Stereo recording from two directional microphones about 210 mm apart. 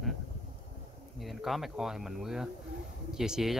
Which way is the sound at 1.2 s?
Centre (ahead or behind).